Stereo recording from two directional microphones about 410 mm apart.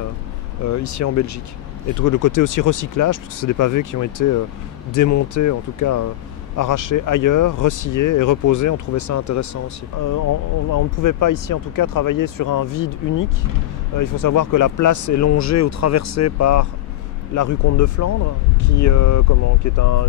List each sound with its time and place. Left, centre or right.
0.7 s speech: left
10.7 s speech: left